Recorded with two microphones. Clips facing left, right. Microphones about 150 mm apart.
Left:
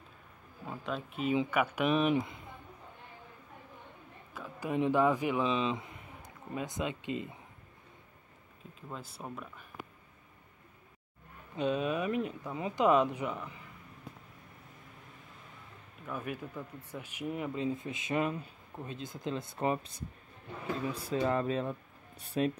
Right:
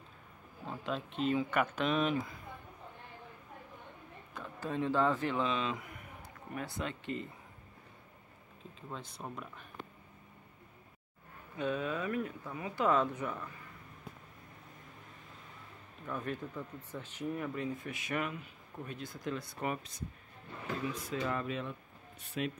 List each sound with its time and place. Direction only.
0.7 s speech: 5° left (ahead or behind); by 2.5 s 25° left (ahead or behind)
4.3 s speech: 10° left (ahead or behind)
5.6 s speech: 25° left (ahead or behind)
8.9 s speech: 5° left (ahead or behind)
11.5 s speech: 20° left (ahead or behind)
16.1 s speech: 10° left (ahead or behind); by 19.9 s 30° left (ahead or behind)
20.9 s speech: 30° left (ahead or behind)